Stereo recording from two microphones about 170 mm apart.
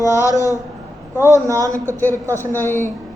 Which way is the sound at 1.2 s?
15° right (ahead or behind).